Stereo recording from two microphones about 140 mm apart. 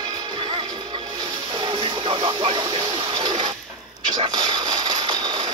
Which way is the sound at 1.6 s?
35° right (ahead or behind).